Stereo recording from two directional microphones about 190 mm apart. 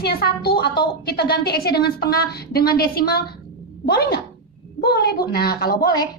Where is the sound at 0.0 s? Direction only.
55° left (ahead or behind).